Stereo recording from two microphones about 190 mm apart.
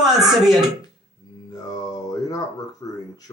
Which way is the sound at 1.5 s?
20° left (ahead or behind).